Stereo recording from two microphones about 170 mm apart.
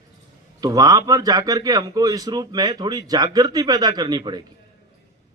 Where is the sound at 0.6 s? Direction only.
20° right (ahead or behind).